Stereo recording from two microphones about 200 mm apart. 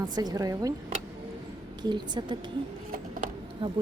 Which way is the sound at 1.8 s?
20° right (ahead or behind).